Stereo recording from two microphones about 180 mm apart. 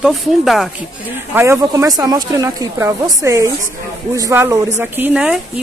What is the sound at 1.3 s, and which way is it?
Speech, 15° right (ahead or behind).